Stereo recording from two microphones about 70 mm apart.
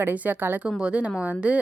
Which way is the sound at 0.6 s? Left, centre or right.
Centre.